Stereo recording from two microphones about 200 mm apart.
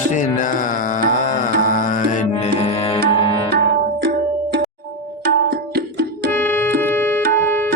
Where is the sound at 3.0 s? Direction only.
25° left (ahead or behind).